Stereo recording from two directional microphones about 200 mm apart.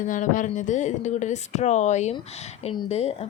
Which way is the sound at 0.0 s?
40° left (ahead or behind).